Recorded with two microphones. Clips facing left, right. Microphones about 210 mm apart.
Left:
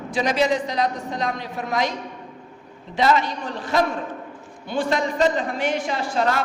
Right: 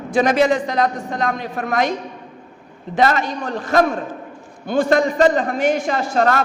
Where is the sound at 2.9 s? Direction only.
50° right (ahead or behind).